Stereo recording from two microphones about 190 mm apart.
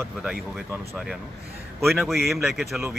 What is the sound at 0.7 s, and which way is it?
Speech, 15° right (ahead or behind).